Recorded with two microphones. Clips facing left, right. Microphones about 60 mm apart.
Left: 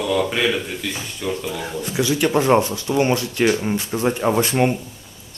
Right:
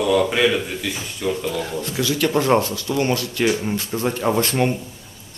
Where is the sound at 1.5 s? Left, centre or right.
Centre.